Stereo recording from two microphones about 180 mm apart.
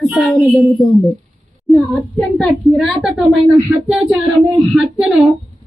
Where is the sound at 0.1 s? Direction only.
5° right (ahead or behind).